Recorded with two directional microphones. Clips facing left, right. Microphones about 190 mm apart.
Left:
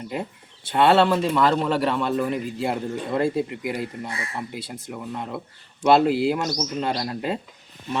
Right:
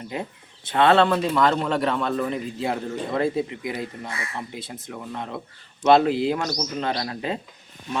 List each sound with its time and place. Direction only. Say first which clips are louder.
0.1 s speech: even; 5° left (ahead or behind)